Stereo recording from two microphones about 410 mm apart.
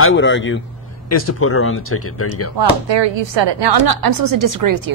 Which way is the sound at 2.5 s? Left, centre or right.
Right.